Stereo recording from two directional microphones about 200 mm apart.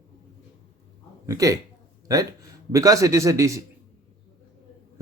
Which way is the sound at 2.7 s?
15° right (ahead or behind).